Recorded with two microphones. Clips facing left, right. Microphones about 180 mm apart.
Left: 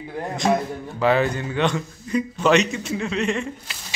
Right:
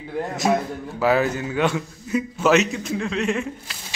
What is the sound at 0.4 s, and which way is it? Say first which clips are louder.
A man's voice: left 1 dB; 5° right (ahead or behind).